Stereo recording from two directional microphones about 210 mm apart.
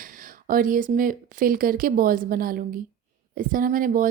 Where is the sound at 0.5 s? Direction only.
40° right (ahead or behind).